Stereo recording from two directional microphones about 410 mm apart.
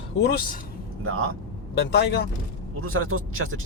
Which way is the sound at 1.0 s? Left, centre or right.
Right.